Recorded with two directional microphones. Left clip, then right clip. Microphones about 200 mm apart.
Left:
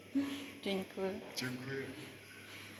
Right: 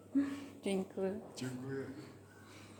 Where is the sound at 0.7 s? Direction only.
25° right (ahead or behind).